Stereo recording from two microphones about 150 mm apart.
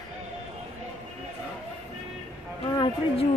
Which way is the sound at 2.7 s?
30° left (ahead or behind).